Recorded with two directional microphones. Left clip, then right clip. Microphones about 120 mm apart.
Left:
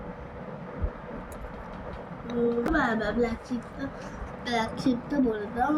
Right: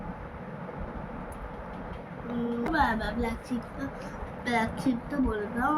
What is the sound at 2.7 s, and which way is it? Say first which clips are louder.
A woman's voice: left 1 dB; 20° right (ahead or behind).